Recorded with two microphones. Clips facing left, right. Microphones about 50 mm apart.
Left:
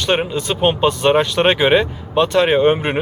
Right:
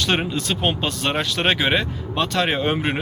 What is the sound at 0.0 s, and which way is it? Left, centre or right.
Speech, centre.